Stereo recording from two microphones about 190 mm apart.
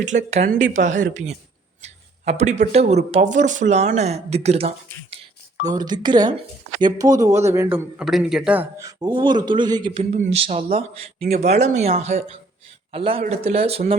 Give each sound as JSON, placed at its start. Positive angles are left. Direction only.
{"t": 0.0, "sound": "speech", "side_deg": -40}
{"t": 5.6, "sound": "a man's voice", "side_deg": -20}
{"t": 10.0, "sound": "speech", "side_deg": -35}